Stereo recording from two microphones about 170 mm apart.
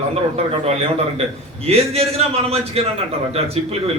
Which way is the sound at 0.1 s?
40° right (ahead or behind).